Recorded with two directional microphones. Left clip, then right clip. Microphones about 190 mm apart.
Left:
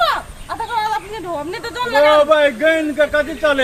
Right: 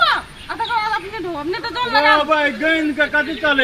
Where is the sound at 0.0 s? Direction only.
25° left (ahead or behind).